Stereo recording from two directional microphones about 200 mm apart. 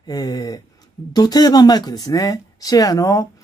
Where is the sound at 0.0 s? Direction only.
20° left (ahead or behind).